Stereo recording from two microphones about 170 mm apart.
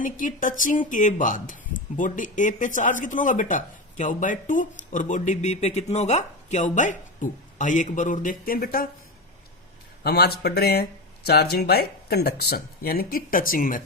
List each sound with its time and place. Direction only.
0.0 s speech: 50° left (ahead or behind)
10.0 s speech: 70° left (ahead or behind)